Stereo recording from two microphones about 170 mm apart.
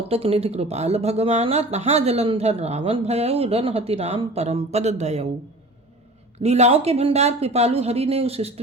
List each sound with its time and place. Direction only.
0.1 s speech: 35° right (ahead or behind)
6.4 s speech: 40° right (ahead or behind)